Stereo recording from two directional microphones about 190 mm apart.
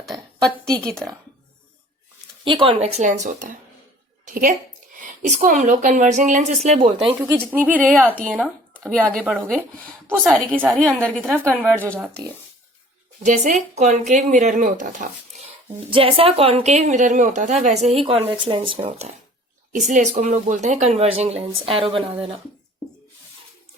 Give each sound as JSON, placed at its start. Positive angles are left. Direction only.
{"t": 0.9, "sound": "speech", "side_deg": 0}
{"t": 2.4, "sound": "a woman's voice", "side_deg": -25}
{"t": 4.9, "sound": "a woman's voice", "side_deg": -40}
{"t": 7.5, "sound": "a woman's voice", "side_deg": -10}
{"t": 7.8, "sound": "speech", "side_deg": 10}
{"t": 10.1, "sound": "a woman's voice", "side_deg": -5}
{"t": 13.2, "sound": "a woman's voice", "side_deg": -40}
{"t": 15.9, "sound": "a woman's voice", "side_deg": -30}